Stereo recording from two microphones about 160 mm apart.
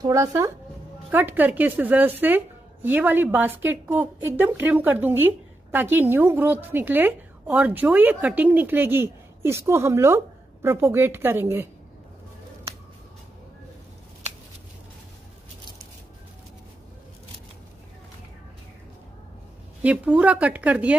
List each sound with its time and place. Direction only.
0.0 s a woman's voice: 20° right (ahead or behind)
19.8 s a woman's voice: 10° right (ahead or behind)